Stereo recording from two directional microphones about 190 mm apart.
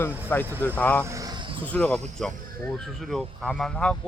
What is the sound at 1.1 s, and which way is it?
Vehicle, 20° right (ahead or behind).